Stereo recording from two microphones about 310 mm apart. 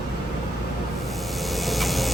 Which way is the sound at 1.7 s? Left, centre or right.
Centre.